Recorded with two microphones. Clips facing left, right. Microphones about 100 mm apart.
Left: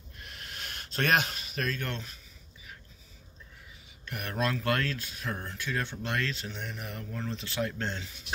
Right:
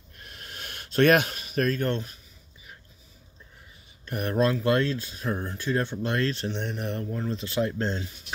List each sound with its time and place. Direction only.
0.2 s a sound: 40° right (ahead or behind)
4.0 s speech: 35° right (ahead or behind)
6.4 s speech: 55° right (ahead or behind)
7.3 s speech: 30° right (ahead or behind)